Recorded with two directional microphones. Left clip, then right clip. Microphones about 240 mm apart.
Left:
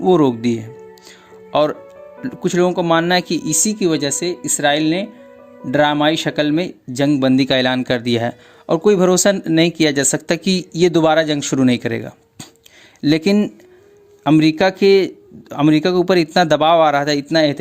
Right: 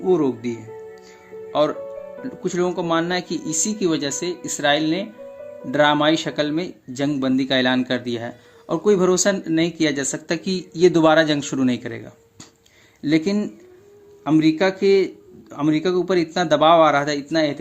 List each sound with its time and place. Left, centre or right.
0.0 s speech: left